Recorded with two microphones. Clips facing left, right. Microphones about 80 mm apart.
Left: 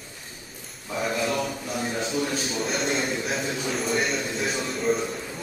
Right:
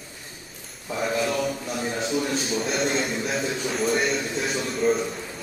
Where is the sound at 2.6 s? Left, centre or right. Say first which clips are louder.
Even; centre.